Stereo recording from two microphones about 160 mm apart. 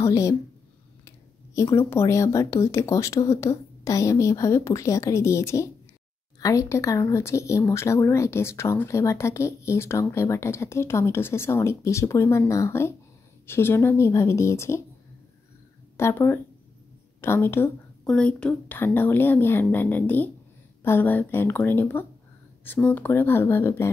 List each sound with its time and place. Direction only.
0.0 s speech: 20° left (ahead or behind)
16.0 s speech: 15° left (ahead or behind)